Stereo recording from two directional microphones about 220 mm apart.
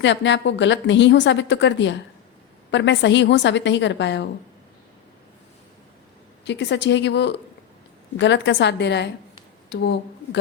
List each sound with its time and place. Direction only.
0.0 s a woman's voice: 55° left (ahead or behind)
6.4 s a woman's voice: 50° left (ahead or behind)